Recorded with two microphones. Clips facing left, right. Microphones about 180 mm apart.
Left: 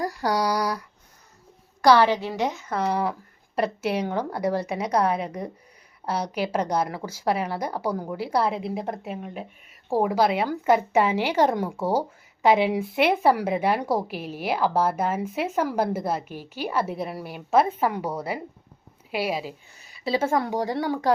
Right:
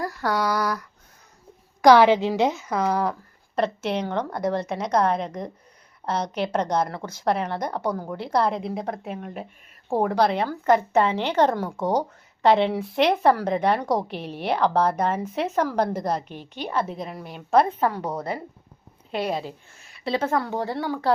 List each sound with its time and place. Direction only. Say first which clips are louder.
0.0 s a woman's voice: left 1 dB; 15° left (ahead or behind)
1.8 s a woman's voice: right 3 dB; 15° right (ahead or behind)
2.8 s a woman's voice: right 1 dB; 5° left (ahead or behind)
20.3 s a woman's voice: left 1 dB; 15° left (ahead or behind)